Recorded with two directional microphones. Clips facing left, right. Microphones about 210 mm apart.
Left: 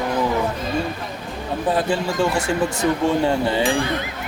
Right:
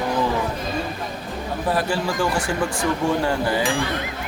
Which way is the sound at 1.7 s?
20° left (ahead or behind).